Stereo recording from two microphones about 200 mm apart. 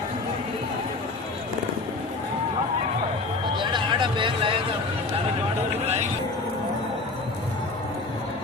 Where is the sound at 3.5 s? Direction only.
25° right (ahead or behind).